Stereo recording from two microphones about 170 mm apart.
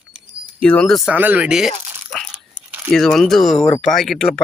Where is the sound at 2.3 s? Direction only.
10° right (ahead or behind).